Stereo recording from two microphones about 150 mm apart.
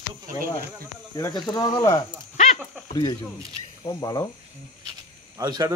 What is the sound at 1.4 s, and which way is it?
Speech, 25° left (ahead or behind).